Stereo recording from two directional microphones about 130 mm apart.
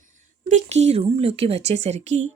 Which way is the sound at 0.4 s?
60° right (ahead or behind).